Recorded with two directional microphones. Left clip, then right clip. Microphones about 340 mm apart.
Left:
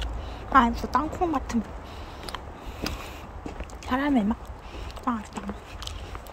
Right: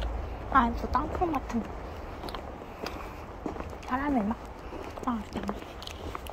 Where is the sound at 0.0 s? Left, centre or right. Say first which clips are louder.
Left 1 dB; left.